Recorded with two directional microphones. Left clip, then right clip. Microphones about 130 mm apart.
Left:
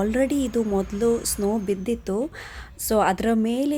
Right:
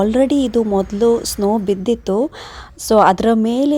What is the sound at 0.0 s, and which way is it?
A woman's voice, 35° right (ahead or behind).